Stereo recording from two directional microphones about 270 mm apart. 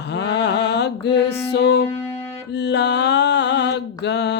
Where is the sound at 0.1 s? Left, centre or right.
Left.